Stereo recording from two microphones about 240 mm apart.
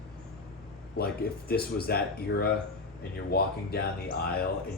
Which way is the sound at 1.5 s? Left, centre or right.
Left.